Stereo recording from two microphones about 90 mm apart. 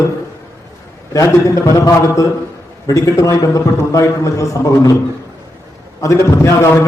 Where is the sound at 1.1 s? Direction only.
35° left (ahead or behind).